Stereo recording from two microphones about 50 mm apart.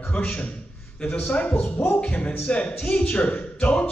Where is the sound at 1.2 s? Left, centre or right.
Left.